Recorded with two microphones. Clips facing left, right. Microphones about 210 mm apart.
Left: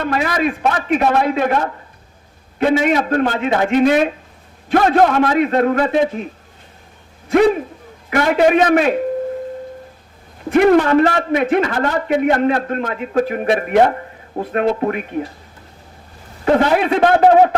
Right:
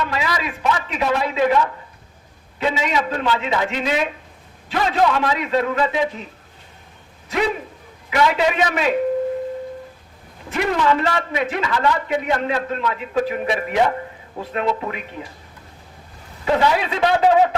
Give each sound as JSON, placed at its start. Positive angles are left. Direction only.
{"t": 0.0, "sound": "a man's voice", "side_deg": 55}
{"t": 7.3, "sound": "a man's voice", "side_deg": 50}
{"t": 10.5, "sound": "a man's voice", "side_deg": 55}
{"t": 16.5, "sound": "a man's voice", "side_deg": 55}